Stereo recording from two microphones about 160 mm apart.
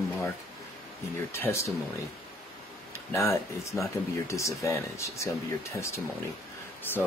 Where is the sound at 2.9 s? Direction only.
20° left (ahead or behind).